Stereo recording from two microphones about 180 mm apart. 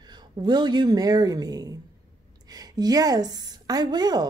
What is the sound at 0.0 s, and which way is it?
A woman's voice, 25° right (ahead or behind).